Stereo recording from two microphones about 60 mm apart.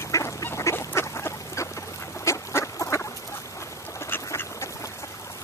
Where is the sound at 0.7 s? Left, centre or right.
Left.